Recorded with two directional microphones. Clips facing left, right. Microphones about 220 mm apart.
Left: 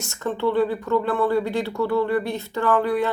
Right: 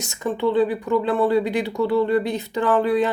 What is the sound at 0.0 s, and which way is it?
Speech, 15° right (ahead or behind).